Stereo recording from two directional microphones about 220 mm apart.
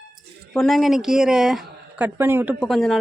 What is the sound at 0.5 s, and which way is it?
Speech, centre (ahead or behind).